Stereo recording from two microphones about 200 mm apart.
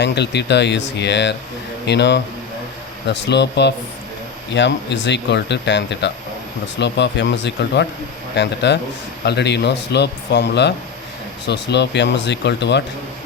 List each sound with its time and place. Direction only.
0.0 s speech: 60° left (ahead or behind)